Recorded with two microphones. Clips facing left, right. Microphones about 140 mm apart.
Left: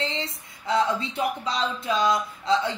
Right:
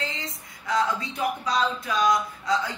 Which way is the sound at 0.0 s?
30° left (ahead or behind).